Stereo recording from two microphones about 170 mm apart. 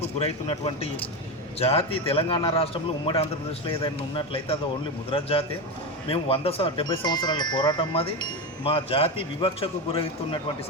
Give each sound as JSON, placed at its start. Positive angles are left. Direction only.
{"t": 0.2, "sound": "speech", "side_deg": 35}
{"t": 3.8, "sound": "speech", "side_deg": 30}